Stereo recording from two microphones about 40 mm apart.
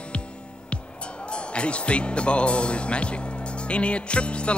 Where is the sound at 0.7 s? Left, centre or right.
Left.